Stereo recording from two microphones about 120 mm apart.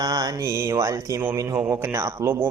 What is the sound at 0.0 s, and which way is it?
A man's voice, 30° right (ahead or behind).